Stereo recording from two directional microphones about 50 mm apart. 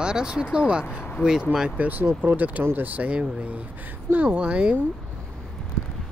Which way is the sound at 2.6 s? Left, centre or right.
Right.